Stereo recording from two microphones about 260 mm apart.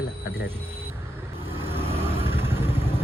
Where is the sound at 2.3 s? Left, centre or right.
Centre.